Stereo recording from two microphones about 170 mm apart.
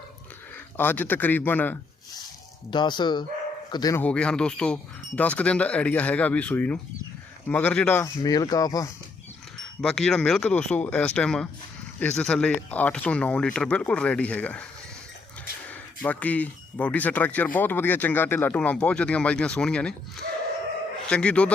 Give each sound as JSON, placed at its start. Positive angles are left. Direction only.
{"t": 0.8, "sound": "speech", "side_deg": 10}
{"t": 2.6, "sound": "speech", "side_deg": 25}
{"t": 4.0, "sound": "speech", "side_deg": 5}
{"t": 9.6, "sound": "speech", "side_deg": 5}
{"t": 16.0, "sound": "speech", "side_deg": 10}
{"t": 21.1, "sound": "speech", "side_deg": 5}